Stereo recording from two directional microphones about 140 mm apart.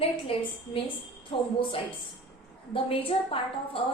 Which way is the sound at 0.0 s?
40° left (ahead or behind).